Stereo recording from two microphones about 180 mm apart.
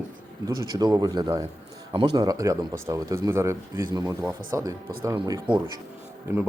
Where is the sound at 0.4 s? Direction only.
20° right (ahead or behind).